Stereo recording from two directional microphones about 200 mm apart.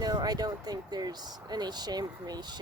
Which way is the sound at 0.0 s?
20° right (ahead or behind).